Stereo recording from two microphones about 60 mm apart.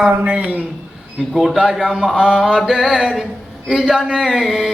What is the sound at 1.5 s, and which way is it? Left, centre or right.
Mantra, centre.